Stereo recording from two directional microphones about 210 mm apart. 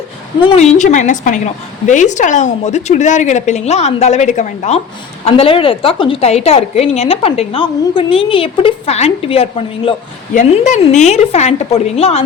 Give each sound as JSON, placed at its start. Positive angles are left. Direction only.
{"t": 0.4, "sound": "a woman's voice", "side_deg": 30}